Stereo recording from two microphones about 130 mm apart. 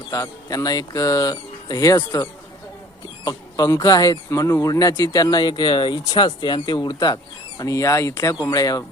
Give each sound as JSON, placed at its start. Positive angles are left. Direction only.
{"t": 0.1, "sound": "speech", "side_deg": 25}
{"t": 3.2, "sound": "speech", "side_deg": 30}